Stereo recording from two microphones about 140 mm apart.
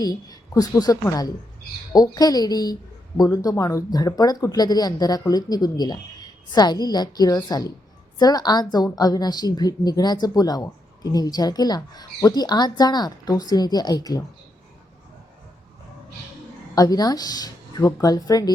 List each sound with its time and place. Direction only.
0.0 s a woman's voice: 25° left (ahead or behind)
16.7 s a woman's voice: 25° left (ahead or behind)